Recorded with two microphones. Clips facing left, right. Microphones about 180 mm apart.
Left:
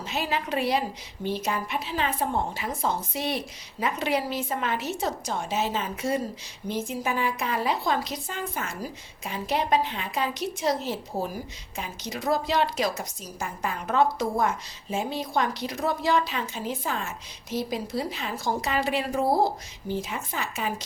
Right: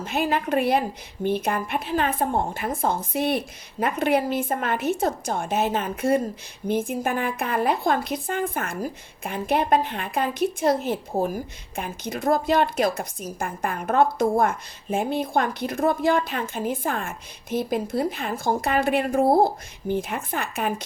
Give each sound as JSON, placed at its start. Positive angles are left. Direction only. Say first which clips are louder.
{"t": 0.0, "sound": "a woman's voice", "louder": "right 5 dB", "side_deg": -50}